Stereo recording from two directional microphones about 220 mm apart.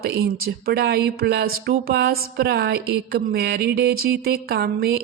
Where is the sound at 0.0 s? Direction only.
45° right (ahead or behind).